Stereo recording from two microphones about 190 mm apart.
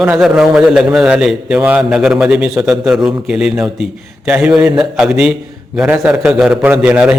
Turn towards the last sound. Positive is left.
turn(degrees=-5)  # may be behind; listen again after turning